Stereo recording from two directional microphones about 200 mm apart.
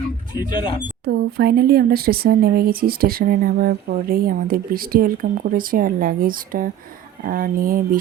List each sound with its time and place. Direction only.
1.0 s speech: 55° right (ahead or behind)